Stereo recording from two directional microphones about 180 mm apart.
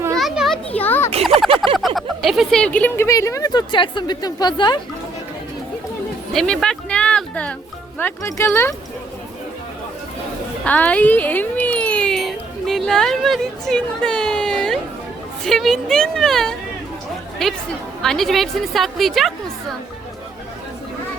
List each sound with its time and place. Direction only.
0.2 s children playing: centre (ahead or behind)
0.8 s a sound: 10° left (ahead or behind)
1.2 s a sound: centre (ahead or behind)
2.0 s speech: centre (ahead or behind); by 4.8 s 25° left (ahead or behind)
6.3 s a woman's voice: 5° left (ahead or behind)
10.6 s a woman's voice: 10° left (ahead or behind)